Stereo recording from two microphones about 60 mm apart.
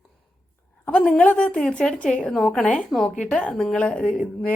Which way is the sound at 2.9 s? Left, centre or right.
Centre.